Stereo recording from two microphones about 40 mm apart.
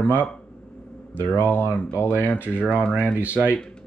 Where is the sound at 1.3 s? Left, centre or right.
Left.